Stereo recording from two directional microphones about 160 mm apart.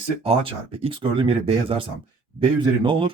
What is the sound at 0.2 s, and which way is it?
Speech, 35° right (ahead or behind).